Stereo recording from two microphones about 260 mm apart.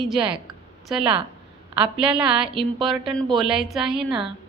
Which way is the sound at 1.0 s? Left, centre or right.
Right.